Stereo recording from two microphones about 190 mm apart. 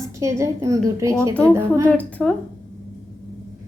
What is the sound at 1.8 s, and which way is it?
Speech, 10° left (ahead or behind).